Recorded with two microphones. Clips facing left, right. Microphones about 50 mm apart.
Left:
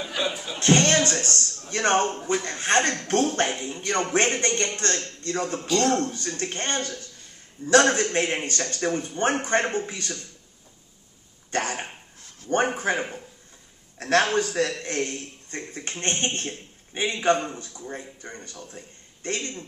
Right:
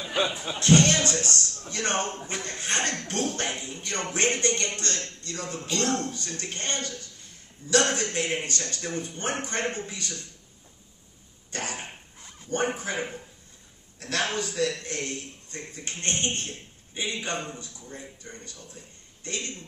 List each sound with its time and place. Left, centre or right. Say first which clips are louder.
0.1 s speech: right 3 dB; right
0.6 s a man's voice: left 1 dB; left
11.5 s a man's voice: left 7 dB; left
12.2 s dog: right 1 dB; centre
12.4 s a man's voice: left 5 dB; left